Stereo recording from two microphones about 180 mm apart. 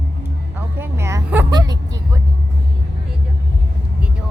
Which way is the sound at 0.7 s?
15° right (ahead or behind).